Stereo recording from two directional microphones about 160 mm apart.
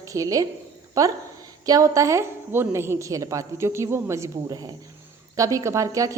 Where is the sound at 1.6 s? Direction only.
20° right (ahead or behind).